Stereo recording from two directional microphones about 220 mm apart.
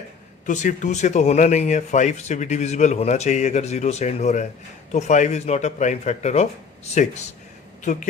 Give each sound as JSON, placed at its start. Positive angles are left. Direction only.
{"t": 0.4, "sound": "speech", "side_deg": 35}